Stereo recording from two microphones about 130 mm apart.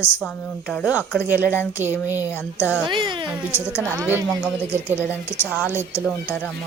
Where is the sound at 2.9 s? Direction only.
40° right (ahead or behind).